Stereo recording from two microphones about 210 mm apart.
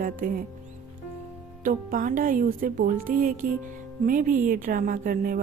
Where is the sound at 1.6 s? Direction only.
40° right (ahead or behind).